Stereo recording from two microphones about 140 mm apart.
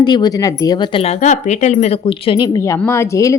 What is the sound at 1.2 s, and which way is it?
A woman's voice, 55° left (ahead or behind).